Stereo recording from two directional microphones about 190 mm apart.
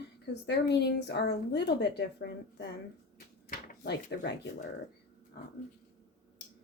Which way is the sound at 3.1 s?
60° left (ahead or behind).